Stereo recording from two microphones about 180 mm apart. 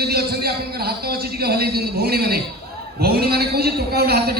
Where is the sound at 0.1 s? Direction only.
60° right (ahead or behind).